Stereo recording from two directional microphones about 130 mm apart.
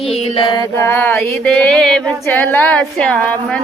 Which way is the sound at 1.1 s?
5° left (ahead or behind).